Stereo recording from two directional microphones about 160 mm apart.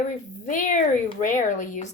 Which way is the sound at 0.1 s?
55° left (ahead or behind).